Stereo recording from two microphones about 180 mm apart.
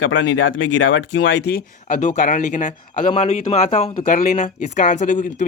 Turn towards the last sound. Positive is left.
turn(degrees=45)  # may be behind; listen again after turning